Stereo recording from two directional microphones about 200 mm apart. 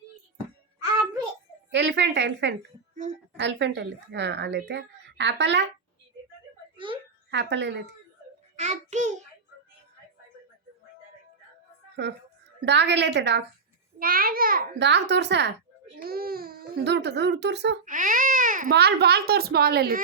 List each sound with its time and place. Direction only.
1.7 s speech: 65° right (ahead or behind)
6.7 s a sound: 25° right (ahead or behind)
7.3 s speech: 60° right (ahead or behind)
8.5 s child singing: 35° right (ahead or behind)
12.6 s speech: 60° right (ahead or behind)
14.0 s a child's voice: 45° right (ahead or behind)
16.0 s speech: 50° right (ahead or behind)
17.8 s baby cry: 40° right (ahead or behind)
18.7 s a woman's voice: 55° right (ahead or behind)